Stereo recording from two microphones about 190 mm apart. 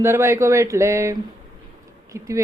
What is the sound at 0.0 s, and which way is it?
Speech, 15° right (ahead or behind).